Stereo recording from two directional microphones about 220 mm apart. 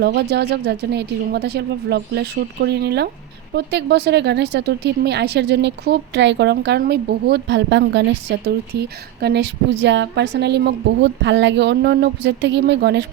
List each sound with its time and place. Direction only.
0.0 s speech: 50° right (ahead or behind)